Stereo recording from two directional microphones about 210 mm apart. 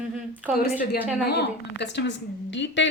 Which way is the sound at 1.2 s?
50° left (ahead or behind).